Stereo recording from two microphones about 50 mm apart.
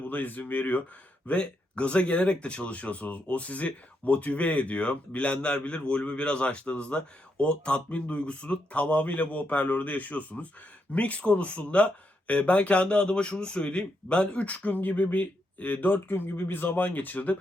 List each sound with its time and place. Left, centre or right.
0.1 s a man's voice: left